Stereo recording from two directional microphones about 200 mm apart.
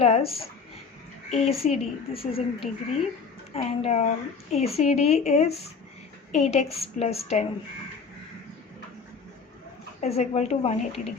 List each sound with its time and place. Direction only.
0.0 s a woman's voice: 30° left (ahead or behind)
10.0 s a woman's voice: 30° left (ahead or behind)